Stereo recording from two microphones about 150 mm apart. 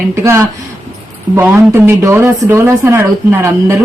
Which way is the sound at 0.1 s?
20° right (ahead or behind).